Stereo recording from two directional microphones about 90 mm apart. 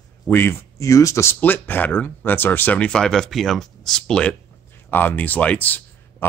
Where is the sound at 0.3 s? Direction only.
25° left (ahead or behind).